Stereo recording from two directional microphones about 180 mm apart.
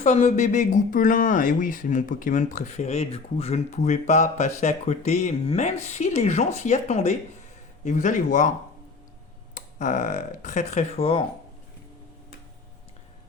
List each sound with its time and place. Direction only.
0.0 s speech: 40° left (ahead or behind)
9.6 s speech: 45° left (ahead or behind)